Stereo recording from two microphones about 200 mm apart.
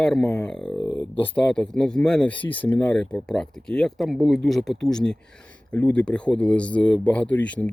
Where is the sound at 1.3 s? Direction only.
5° left (ahead or behind).